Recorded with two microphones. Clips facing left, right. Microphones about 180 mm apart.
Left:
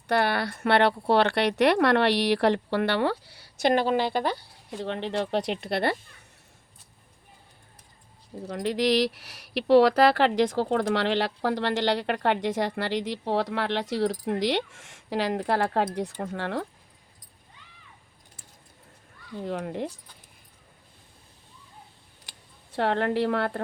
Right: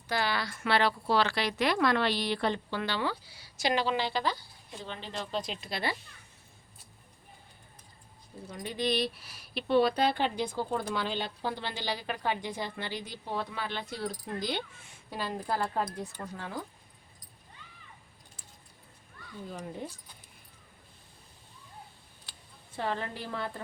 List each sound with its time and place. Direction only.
0.1 s speech: 60° left (ahead or behind)
8.4 s a woman's voice: 75° left (ahead or behind)
19.4 s speech: 70° left (ahead or behind)
22.7 s a woman's voice: 75° left (ahead or behind)